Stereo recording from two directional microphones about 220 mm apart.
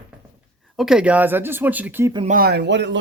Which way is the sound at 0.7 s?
Centre (ahead or behind).